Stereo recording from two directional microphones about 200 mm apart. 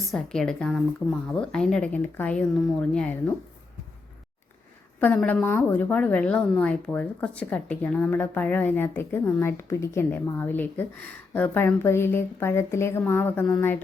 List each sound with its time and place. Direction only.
0.0 s a woman's voice: centre (ahead or behind)
4.9 s a woman's voice: 5° left (ahead or behind)